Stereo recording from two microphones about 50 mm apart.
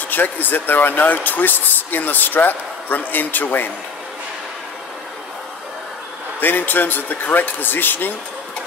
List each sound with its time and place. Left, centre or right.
0.1 s speech: left
6.4 s speech: left